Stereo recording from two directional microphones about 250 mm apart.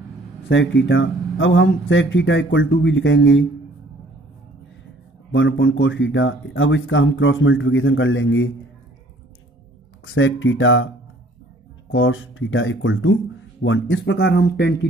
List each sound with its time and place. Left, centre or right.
0.5 s speech: left
5.3 s speech: left
10.0 s speech: left
11.9 s speech: left